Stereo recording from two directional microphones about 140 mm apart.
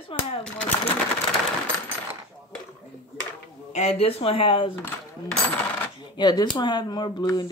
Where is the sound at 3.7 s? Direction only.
45° left (ahead or behind).